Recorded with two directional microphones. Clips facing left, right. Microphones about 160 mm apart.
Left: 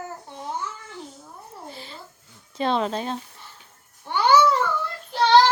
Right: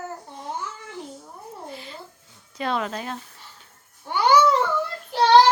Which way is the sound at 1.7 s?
30° left (ahead or behind).